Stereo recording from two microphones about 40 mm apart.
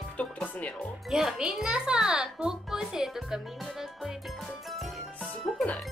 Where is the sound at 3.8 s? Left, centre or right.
Centre.